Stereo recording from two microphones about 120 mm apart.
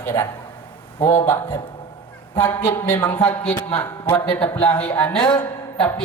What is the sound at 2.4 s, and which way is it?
A man's voice, 15° left (ahead or behind).